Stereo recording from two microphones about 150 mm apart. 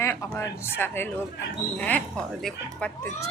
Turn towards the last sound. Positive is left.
turn(degrees=10)  # may be behind; listen again after turning